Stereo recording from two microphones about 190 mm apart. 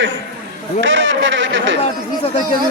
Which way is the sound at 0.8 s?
85° right.